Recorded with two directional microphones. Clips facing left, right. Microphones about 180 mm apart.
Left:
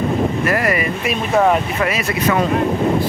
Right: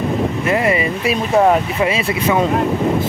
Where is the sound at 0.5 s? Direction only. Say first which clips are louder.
Right 2 dB; 25° right (ahead or behind).